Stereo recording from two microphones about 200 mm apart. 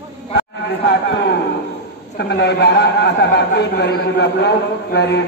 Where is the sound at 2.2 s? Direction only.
60° left (ahead or behind).